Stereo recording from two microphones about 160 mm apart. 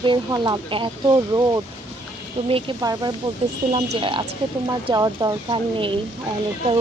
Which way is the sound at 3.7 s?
35° right (ahead or behind).